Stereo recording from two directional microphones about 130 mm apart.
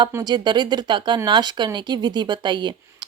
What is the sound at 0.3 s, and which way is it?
Speech, 35° right (ahead or behind).